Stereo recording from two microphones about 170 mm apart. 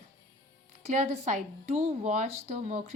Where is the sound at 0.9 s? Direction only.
45° right (ahead or behind).